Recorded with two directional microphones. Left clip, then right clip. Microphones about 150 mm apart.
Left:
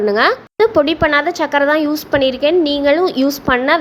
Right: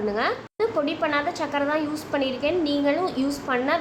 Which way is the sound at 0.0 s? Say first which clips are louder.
Left 11 dB; 60° left (ahead or behind).